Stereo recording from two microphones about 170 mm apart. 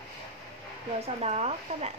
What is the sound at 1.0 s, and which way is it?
Speech, 40° right (ahead or behind).